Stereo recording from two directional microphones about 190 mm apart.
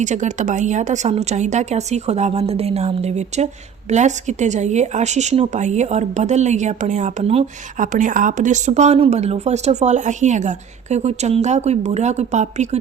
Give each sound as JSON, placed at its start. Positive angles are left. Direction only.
{"t": 0.0, "sound": "speech", "side_deg": -40}